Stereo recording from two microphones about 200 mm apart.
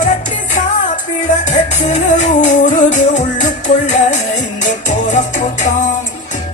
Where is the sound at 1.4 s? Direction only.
35° left (ahead or behind).